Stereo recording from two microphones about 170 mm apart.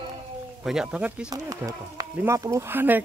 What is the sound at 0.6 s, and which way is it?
Speech, 5° right (ahead or behind).